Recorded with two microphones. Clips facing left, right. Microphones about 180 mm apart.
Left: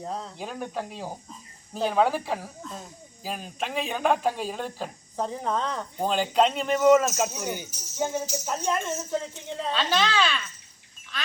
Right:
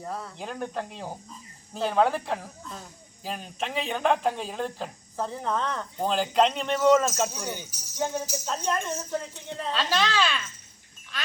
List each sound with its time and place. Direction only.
0.0 s speech: 20° left (ahead or behind)
0.3 s speech: 5° left (ahead or behind)
5.1 s speech: 15° left (ahead or behind)
6.1 s speech: centre (ahead or behind)
9.7 s speech: centre (ahead or behind)